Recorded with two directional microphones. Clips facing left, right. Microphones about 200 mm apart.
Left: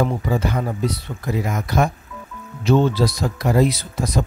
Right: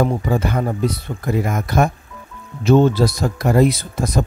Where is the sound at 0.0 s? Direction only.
50° right (ahead or behind).